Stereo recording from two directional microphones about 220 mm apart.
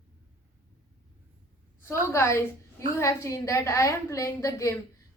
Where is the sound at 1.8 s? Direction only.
10° left (ahead or behind).